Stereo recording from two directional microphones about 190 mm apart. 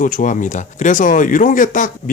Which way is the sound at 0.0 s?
45° left (ahead or behind).